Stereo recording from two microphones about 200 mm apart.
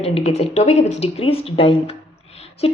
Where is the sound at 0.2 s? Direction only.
30° left (ahead or behind).